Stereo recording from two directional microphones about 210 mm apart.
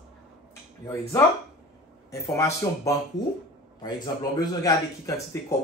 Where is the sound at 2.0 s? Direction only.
15° left (ahead or behind).